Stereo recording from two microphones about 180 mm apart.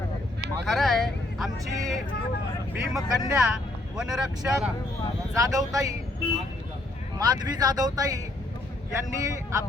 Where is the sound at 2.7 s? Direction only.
5° right (ahead or behind).